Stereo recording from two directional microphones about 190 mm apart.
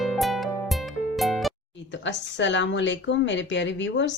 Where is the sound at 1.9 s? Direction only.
70° left (ahead or behind).